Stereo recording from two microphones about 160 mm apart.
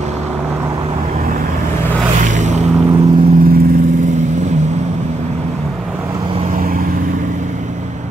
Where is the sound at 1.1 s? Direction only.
60° right (ahead or behind).